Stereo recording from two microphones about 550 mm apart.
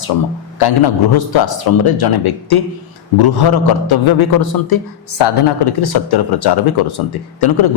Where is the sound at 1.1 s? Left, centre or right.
Left.